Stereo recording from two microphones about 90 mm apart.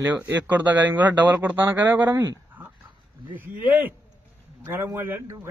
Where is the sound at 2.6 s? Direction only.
20° right (ahead or behind).